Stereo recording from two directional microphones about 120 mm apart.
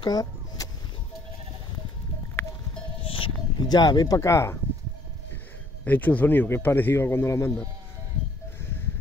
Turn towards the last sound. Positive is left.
turn(degrees=25)  # may be behind; listen again after turning